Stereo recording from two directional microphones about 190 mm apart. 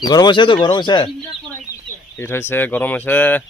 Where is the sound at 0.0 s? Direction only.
20° left (ahead or behind).